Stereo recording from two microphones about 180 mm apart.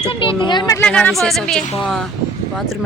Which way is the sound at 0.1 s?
30° left (ahead or behind).